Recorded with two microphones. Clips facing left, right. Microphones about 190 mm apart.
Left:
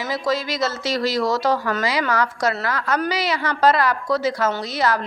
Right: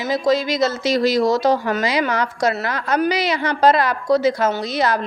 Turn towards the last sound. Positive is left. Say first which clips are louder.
# right 2 dB
turn(degrees=-15)  # may be behind; listen again after turning